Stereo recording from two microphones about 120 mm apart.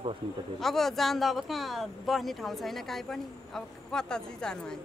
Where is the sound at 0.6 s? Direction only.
5° left (ahead or behind).